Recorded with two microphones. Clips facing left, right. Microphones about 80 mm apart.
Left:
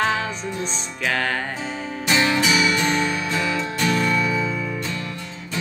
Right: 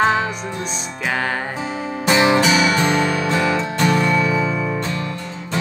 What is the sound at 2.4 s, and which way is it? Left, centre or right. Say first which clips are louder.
Music: right 4 dB; right.